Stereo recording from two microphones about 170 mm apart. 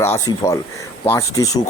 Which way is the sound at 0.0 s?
15° left (ahead or behind).